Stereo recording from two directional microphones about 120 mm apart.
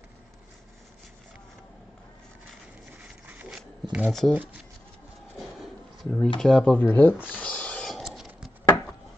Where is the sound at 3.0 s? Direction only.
10° right (ahead or behind).